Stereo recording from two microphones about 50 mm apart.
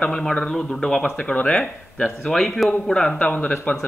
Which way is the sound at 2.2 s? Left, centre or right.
Centre.